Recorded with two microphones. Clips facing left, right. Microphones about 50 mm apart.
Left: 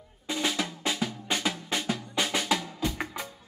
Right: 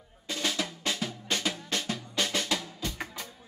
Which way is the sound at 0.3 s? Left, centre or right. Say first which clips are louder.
Left 2 dB; centre.